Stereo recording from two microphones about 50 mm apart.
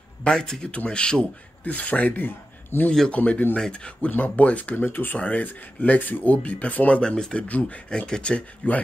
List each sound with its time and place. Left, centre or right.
0.2 s speech: centre
1.6 s speech: left
2.1 s a man's voice: left
3.1 s speech: left
3.5 s speech: centre
4.8 s speech: left
5.2 s speech: left
7.0 s speech: centre
7.4 s speech: left